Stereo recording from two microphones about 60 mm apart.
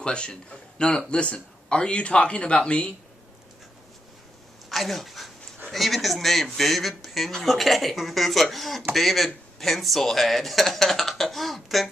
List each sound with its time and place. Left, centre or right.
0.0 s a man's voice: centre
4.6 s dog: centre
5.7 s a man's voice: centre